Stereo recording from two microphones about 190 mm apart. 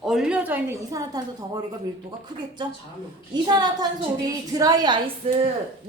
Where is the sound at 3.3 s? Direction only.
20° right (ahead or behind).